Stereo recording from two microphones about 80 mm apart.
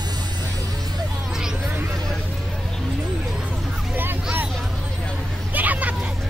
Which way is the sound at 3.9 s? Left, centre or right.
Right.